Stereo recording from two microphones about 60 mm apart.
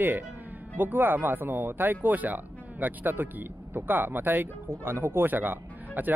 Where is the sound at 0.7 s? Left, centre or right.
Right.